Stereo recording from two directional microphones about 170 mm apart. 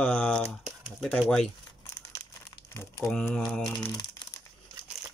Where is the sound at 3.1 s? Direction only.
5° left (ahead or behind).